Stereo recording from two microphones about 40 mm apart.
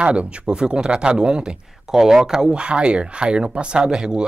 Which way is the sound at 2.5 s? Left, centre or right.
Right.